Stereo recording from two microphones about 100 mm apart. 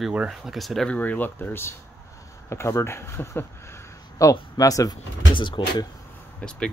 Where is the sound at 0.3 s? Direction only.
Centre (ahead or behind).